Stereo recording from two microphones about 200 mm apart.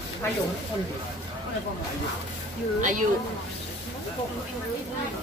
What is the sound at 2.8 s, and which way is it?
Speech, 40° right (ahead or behind).